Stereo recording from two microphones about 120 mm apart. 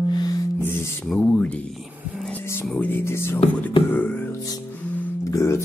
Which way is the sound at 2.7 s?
15° left (ahead or behind).